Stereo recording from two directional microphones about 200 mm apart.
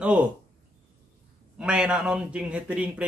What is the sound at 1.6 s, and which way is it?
Speech, 5° right (ahead or behind).